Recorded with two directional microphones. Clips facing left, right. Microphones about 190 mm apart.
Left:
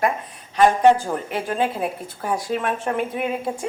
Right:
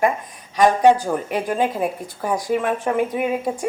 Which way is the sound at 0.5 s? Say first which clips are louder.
Right 1 dB; 10° right (ahead or behind).